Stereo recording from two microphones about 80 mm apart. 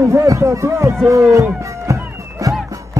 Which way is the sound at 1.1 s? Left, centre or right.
Right.